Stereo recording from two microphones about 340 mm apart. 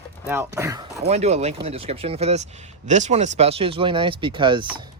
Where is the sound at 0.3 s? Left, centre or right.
Centre.